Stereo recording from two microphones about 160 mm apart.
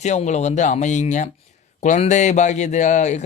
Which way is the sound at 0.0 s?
45° left (ahead or behind).